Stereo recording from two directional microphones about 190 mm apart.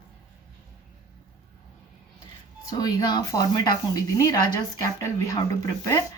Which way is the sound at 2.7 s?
20° left (ahead or behind).